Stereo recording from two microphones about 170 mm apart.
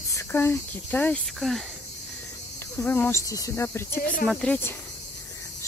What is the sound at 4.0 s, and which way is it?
Speech, 55° left (ahead or behind).